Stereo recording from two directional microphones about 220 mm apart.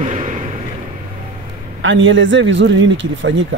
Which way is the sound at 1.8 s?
60° right (ahead or behind).